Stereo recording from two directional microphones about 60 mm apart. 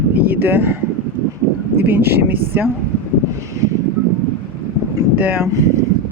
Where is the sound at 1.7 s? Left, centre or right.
Right.